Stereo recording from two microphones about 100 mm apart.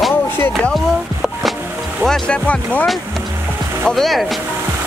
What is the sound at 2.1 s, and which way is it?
Speech, 10° left (ahead or behind).